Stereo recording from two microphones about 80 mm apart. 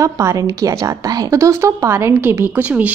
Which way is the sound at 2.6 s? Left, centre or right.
Centre.